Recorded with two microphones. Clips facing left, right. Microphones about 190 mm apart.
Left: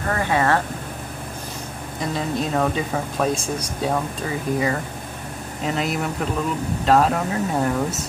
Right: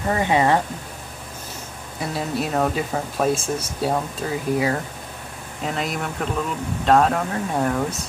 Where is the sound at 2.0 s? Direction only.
5° right (ahead or behind).